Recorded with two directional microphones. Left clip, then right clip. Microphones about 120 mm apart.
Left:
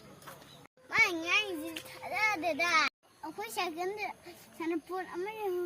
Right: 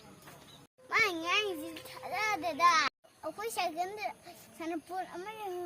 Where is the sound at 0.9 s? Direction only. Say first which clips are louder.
Left 1 dB; 20° right (ahead or behind).